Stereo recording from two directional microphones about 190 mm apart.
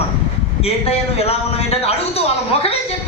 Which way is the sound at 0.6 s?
30° left (ahead or behind).